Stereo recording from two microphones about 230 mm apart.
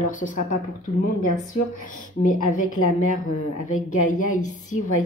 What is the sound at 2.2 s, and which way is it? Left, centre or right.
Speech, left.